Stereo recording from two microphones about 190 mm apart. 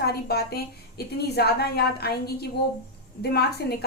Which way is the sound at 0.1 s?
55° left (ahead or behind).